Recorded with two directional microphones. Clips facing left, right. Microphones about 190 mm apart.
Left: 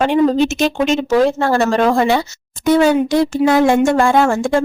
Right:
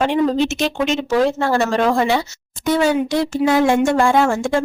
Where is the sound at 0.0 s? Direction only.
45° left (ahead or behind).